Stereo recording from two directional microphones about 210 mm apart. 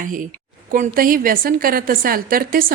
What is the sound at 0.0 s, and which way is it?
A woman's voice, 40° right (ahead or behind).